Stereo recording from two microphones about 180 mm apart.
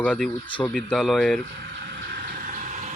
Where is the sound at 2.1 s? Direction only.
50° right (ahead or behind).